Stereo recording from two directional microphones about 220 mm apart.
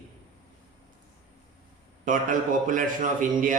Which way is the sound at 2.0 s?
35° right (ahead or behind).